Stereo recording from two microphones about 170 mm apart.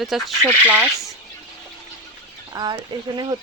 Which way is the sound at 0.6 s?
10° right (ahead or behind).